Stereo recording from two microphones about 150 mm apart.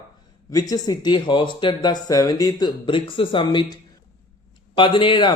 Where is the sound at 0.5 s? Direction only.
25° left (ahead or behind).